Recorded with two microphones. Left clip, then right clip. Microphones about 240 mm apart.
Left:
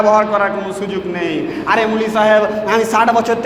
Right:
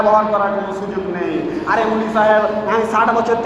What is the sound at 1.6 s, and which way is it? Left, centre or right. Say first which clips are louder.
A man's voice: left 3 dB; left.